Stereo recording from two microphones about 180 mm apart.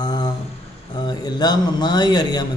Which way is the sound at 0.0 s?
25° left (ahead or behind).